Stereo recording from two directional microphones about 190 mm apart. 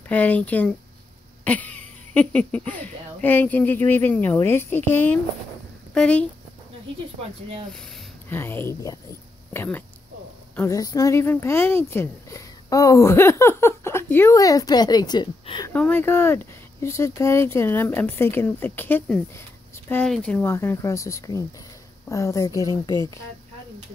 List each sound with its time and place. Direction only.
0.1 s a woman's voice: 10° left (ahead or behind)
7.7 s a woman's voice: 5° left (ahead or behind); by 15.7 s 25° left (ahead or behind)
15.7 s a woman's voice: 10° left (ahead or behind)